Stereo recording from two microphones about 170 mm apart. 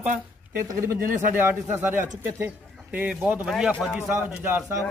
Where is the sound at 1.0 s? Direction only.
55° right (ahead or behind).